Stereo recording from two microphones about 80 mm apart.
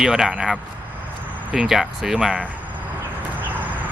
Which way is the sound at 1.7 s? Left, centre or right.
Centre.